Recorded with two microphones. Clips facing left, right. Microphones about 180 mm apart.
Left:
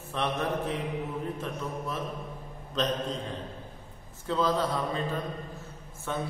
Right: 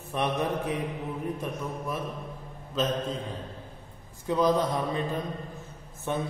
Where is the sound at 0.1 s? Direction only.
15° right (ahead or behind).